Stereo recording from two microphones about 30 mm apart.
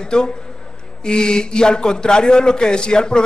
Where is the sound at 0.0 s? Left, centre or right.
Left.